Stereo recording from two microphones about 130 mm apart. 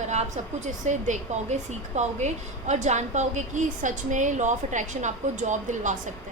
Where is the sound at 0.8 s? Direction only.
65° right (ahead or behind).